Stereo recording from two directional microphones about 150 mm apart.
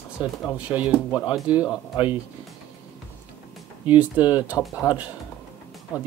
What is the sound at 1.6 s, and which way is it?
Speech, 25° left (ahead or behind).